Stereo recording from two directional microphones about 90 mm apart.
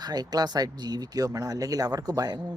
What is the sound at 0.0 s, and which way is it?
Speech, 45° right (ahead or behind).